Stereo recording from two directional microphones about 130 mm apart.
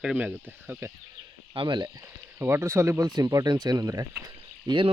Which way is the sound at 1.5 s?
35° right (ahead or behind).